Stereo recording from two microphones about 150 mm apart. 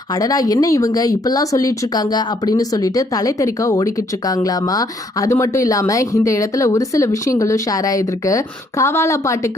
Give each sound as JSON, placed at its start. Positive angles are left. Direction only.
{"t": 0.1, "sound": "speech", "side_deg": 25}